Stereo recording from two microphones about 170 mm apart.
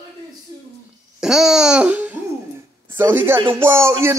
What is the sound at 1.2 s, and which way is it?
Babbling, centre (ahead or behind).